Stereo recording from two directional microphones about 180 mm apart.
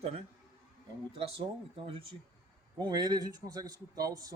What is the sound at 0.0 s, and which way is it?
A man's voice, 35° right (ahead or behind).